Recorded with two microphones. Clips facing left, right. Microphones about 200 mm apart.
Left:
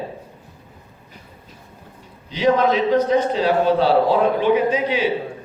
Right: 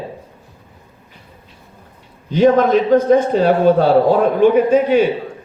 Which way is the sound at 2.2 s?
50° right (ahead or behind).